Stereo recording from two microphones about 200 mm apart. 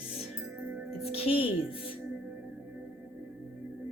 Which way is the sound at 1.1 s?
30° left (ahead or behind).